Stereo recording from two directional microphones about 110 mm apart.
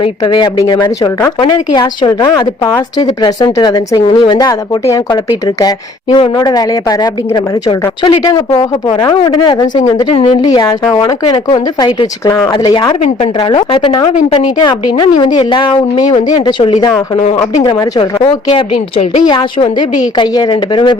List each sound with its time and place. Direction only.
0.0 s speech: 45° left (ahead or behind)
9.0 s speech: 30° left (ahead or behind)
10.5 s speech: 40° left (ahead or behind)
13.5 s speech: 50° left (ahead or behind)
18.2 s a woman's voice: 60° left (ahead or behind)